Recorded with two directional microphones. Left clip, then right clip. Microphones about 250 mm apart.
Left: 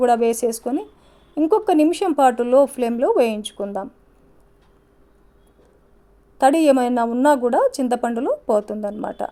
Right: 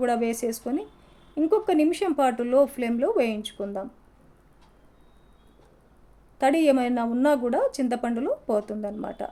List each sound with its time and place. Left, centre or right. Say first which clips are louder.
0.0 s a woman's voice: left 8 dB; left
6.4 s a woman's voice: left 6 dB; left